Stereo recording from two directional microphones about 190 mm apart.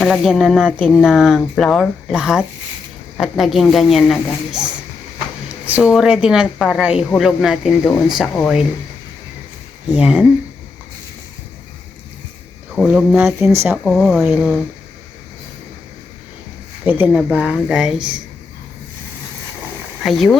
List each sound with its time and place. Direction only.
0.0 s speech: centre (ahead or behind)
5.6 s speech: 5° right (ahead or behind)
9.9 s speech: 5° right (ahead or behind)
12.7 s speech: centre (ahead or behind)
16.8 s speech: 10° right (ahead or behind)
20.0 s speech: centre (ahead or behind)